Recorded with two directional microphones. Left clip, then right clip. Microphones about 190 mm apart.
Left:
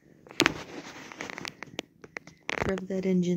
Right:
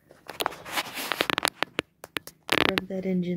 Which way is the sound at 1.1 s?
90° right.